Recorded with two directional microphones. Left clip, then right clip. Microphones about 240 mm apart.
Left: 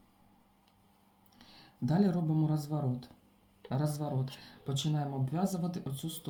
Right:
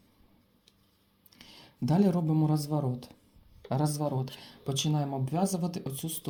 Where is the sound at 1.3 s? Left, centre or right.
Right.